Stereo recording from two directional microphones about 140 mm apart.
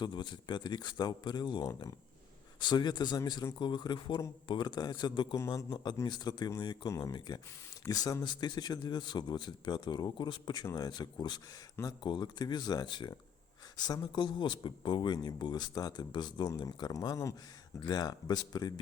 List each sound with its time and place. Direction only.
0.0 s speech: 30° left (ahead or behind)